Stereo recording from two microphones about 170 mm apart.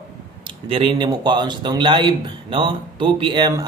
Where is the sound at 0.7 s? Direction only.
30° right (ahead or behind).